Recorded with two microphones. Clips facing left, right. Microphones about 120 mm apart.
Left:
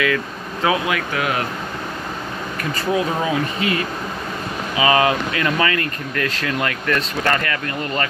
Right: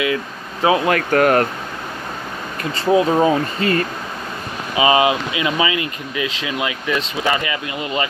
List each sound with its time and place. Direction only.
0.0 s speech: 25° right (ahead or behind)
0.8 s speech: 50° right (ahead or behind)
2.8 s speech: 25° right (ahead or behind)
4.7 s speech: 20° right (ahead or behind)